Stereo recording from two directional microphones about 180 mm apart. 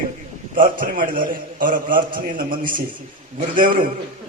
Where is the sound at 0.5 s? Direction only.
50° right (ahead or behind).